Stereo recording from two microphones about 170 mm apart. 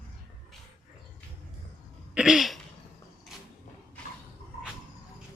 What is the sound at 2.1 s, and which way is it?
Throat clearing, 5° right (ahead or behind).